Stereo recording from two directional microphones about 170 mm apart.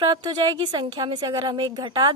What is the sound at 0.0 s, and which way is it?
A woman's voice, 25° right (ahead or behind).